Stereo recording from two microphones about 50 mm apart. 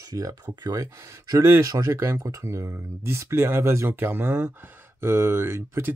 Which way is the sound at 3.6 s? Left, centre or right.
Right.